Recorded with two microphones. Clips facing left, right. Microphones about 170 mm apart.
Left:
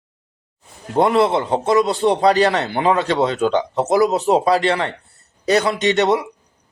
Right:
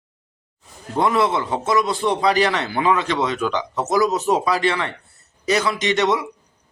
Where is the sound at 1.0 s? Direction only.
30° left (ahead or behind).